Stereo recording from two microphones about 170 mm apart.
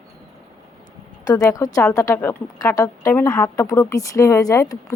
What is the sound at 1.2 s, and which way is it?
Speech, 20° left (ahead or behind).